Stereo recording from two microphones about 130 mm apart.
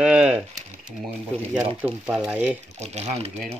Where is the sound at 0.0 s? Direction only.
10° right (ahead or behind).